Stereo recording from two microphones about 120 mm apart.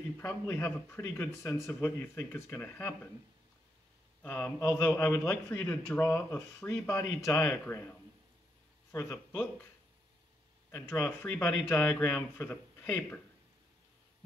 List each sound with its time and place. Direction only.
0.2 s speech: 20° left (ahead or behind)
4.2 s speech: 15° left (ahead or behind)
5.5 s speech: 10° left (ahead or behind)
8.9 s speech: 20° left (ahead or behind)
10.7 s speech: 20° left (ahead or behind)